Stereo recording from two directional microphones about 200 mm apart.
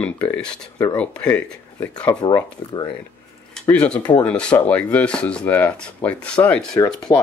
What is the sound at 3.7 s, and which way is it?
Speech, 5° left (ahead or behind).